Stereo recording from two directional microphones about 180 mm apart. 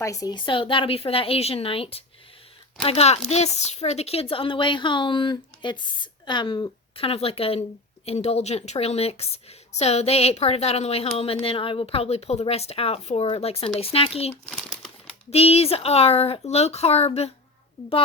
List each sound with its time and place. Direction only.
0.0 s a woman's voice: 20° left (ahead or behind); by 14.3 s 35° left (ahead or behind)
14.4 s crumpling: 5° left (ahead or behind)
15.3 s a woman's voice: 35° left (ahead or behind)